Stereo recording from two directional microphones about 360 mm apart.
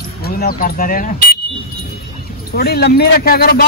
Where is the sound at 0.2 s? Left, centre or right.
Left.